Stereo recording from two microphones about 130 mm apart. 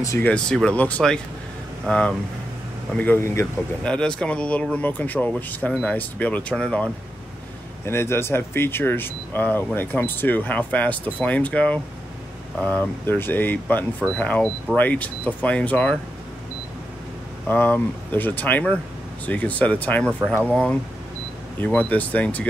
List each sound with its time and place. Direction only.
0.2 s speech: 5° left (ahead or behind)
3.8 s speech: 5° left (ahead or behind)
7.8 s speech: 20° left (ahead or behind)
17.5 s speech: 15° left (ahead or behind)
21.5 s speech: 10° left (ahead or behind)